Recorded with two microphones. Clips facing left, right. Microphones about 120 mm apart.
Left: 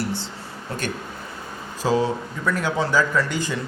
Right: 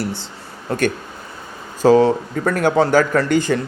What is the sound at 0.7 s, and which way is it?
Speech, 50° right (ahead or behind).